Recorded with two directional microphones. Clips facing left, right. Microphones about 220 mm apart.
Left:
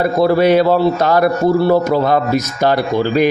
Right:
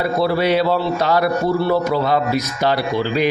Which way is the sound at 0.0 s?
45° left (ahead or behind).